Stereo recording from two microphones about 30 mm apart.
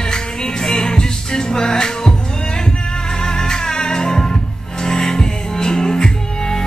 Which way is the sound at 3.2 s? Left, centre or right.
Left.